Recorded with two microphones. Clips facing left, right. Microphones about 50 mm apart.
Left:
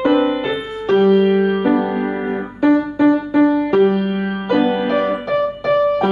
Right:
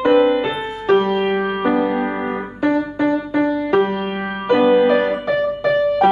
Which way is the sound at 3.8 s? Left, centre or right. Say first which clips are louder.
Left 4 dB; centre.